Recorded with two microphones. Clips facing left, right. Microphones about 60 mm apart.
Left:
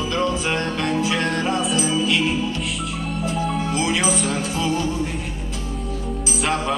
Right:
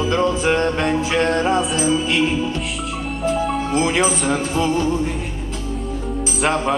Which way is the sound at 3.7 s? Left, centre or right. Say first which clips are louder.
Right 5 dB; right.